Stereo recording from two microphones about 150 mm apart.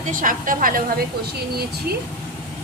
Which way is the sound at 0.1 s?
65° right (ahead or behind).